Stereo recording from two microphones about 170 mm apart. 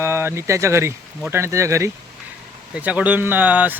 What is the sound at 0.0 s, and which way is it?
Speech, 15° right (ahead or behind).